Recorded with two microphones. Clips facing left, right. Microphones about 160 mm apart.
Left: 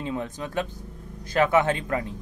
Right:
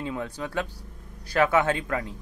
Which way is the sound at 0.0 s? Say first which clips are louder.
Left 1 dB; 20° left (ahead or behind).